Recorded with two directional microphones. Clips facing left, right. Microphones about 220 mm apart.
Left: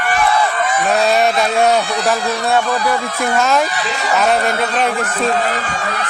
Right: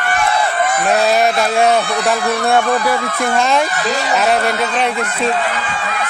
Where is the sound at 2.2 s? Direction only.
55° right (ahead or behind).